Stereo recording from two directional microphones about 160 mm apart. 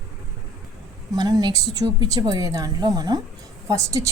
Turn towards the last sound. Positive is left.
turn(degrees=-20)  # may be behind; listen again after turning